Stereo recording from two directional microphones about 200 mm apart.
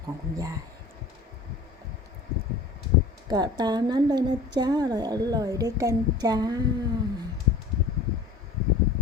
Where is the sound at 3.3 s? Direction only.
20° right (ahead or behind).